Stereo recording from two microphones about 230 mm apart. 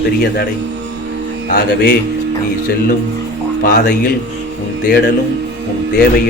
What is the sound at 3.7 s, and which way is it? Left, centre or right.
Speech, left.